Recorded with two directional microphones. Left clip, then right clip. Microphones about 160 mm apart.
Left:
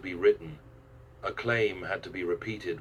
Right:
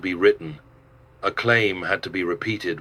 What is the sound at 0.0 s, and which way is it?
Speech, 45° right (ahead or behind).